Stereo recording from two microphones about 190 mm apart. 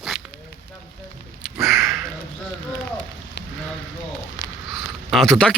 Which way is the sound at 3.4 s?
65° left (ahead or behind).